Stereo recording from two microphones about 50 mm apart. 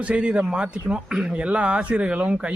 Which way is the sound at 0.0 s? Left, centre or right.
Right.